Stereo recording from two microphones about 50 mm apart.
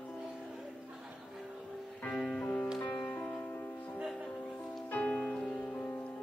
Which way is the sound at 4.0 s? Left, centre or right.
Centre.